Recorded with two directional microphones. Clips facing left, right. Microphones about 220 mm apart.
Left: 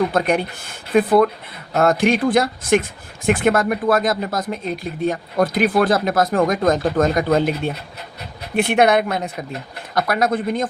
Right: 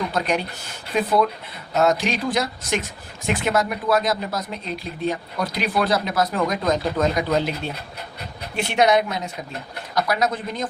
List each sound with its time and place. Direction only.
0.1 s speech: 55° left (ahead or behind)